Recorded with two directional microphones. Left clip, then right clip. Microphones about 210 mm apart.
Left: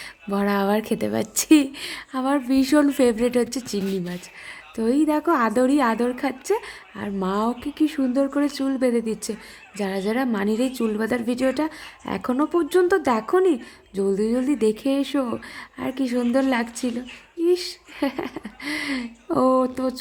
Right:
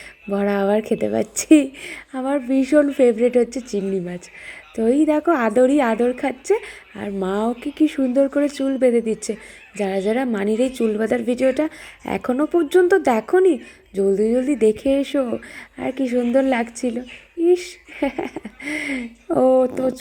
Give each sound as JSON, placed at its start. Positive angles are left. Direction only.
{"t": 0.3, "sound": "a woman's voice", "side_deg": 0}